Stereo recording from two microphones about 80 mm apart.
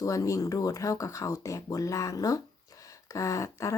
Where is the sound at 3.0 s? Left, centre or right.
Left.